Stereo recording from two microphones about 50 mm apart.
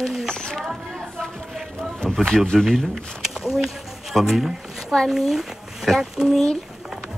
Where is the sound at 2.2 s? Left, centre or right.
Centre.